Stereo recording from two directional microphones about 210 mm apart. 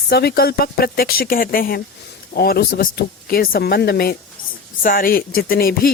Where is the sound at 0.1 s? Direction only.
50° left (ahead or behind).